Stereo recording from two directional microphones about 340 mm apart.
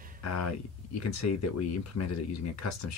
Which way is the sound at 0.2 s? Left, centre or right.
Left.